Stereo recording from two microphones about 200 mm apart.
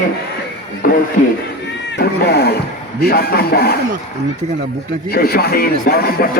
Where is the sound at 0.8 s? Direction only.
45° left (ahead or behind).